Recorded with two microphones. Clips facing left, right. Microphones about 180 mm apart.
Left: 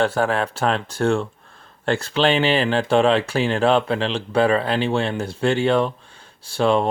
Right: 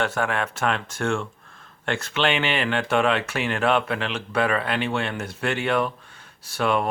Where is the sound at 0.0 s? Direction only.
35° left (ahead or behind).